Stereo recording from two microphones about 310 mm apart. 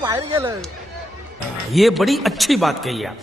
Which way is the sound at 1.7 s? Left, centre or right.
Centre.